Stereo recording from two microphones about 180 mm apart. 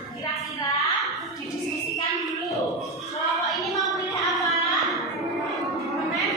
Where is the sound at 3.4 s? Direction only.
Centre (ahead or behind).